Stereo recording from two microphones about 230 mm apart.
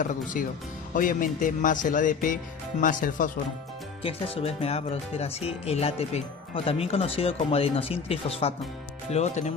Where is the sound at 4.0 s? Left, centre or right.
Left.